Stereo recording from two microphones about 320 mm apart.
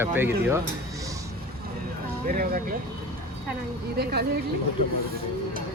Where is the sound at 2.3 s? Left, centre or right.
Right.